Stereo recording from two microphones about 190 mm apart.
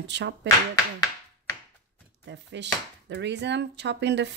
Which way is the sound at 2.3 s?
65° right (ahead or behind).